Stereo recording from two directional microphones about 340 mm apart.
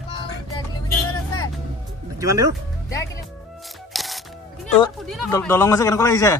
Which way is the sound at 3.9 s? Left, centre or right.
Centre.